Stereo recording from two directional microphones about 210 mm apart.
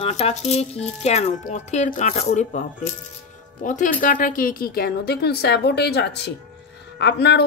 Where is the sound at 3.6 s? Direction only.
40° left (ahead or behind); by 7.4 s 55° left (ahead or behind).